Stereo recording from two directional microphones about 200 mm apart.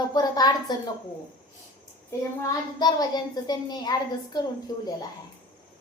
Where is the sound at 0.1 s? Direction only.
20° left (ahead or behind).